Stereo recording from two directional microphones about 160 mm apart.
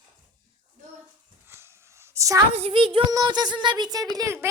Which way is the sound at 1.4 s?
15° right (ahead or behind).